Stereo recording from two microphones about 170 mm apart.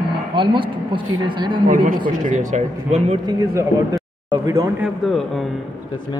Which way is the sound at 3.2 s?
20° right (ahead or behind).